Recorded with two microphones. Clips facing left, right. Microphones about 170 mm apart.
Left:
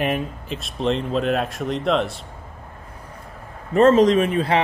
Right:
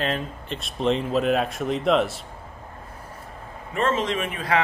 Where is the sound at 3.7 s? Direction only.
40° left (ahead or behind).